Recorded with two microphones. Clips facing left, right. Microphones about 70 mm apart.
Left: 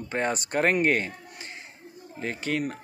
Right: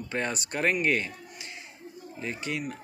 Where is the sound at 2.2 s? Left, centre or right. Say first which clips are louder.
Left 4 dB; left.